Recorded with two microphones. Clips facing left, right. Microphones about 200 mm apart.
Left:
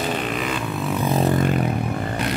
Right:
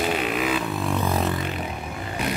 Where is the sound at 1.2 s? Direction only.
45° left (ahead or behind).